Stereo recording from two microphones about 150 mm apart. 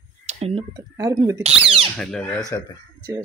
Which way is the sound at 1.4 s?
40° right (ahead or behind).